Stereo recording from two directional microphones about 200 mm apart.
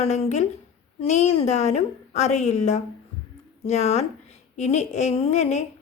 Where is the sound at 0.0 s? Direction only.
30° left (ahead or behind).